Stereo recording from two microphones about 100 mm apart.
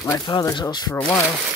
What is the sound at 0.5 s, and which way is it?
Speech, 45° left (ahead or behind).